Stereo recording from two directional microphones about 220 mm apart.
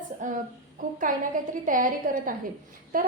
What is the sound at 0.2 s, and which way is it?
A woman's voice, 35° right (ahead or behind).